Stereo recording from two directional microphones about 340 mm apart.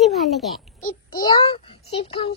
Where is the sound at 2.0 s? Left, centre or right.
Centre.